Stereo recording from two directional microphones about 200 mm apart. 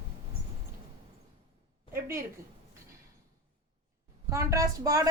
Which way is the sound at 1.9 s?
15° right (ahead or behind).